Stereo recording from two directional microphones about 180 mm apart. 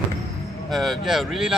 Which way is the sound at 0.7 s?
Centre (ahead or behind).